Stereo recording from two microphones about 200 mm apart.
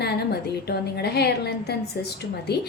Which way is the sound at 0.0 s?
55° left (ahead or behind).